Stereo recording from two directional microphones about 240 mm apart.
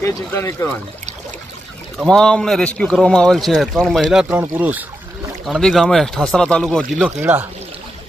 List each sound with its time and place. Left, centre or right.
0.0 s speech: centre
2.0 s speech: centre